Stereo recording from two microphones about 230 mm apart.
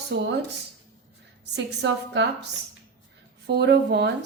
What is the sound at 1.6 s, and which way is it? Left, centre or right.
Speech, right.